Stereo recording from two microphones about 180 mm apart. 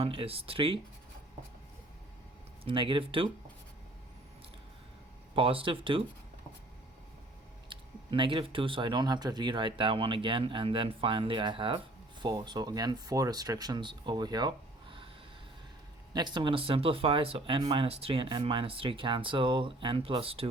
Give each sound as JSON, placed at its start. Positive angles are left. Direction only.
{"t": 0.0, "sound": "speech", "side_deg": -30}
{"t": 2.6, "sound": "speech", "side_deg": -30}
{"t": 5.3, "sound": "speech", "side_deg": -30}
{"t": 7.7, "sound": "speech", "side_deg": -25}
{"t": 16.1, "sound": "speech", "side_deg": -25}